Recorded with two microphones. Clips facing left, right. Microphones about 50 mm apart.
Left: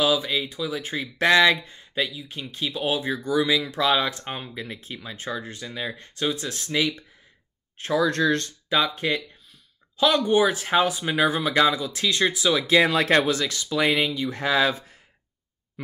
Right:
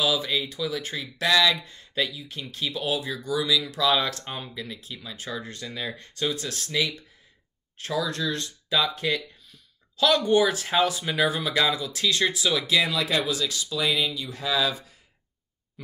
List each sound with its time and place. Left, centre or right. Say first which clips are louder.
0.2 s speech: left 1 dB; centre
1.8 s speech: left 1 dB; centre
2.8 s speech: left 4 dB; left
3.9 s speech: left 2 dB; left
5.3 s speech: left 2 dB; centre
8.1 s speech: left 7 dB; left
8.6 s speech: left 1 dB; left
12.6 s speech: left 5 dB; left